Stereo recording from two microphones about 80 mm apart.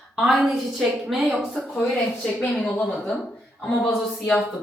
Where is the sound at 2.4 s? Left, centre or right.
Centre.